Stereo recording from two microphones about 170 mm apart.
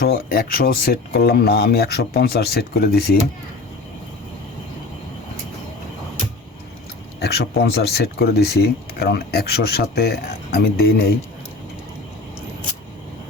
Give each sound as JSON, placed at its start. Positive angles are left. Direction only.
{"t": 0.0, "sound": "speech", "side_deg": 60}
{"t": 7.2, "sound": "speech", "side_deg": 70}